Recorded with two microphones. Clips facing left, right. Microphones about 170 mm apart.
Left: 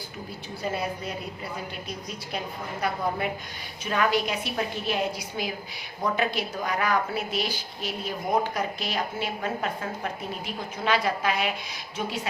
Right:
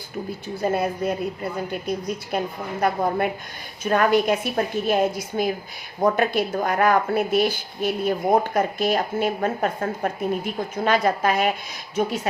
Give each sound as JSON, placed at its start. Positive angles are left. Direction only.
{"t": 0.6, "sound": "speech", "side_deg": -50}
{"t": 2.3, "sound": "speech", "side_deg": -50}